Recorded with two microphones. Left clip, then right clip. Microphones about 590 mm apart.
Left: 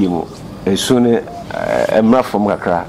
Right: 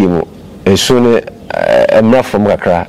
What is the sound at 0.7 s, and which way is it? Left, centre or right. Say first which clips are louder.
Speech: right 4 dB; right.